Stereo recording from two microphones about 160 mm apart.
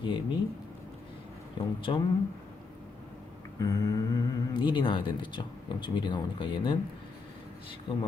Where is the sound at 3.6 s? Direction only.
20° left (ahead or behind).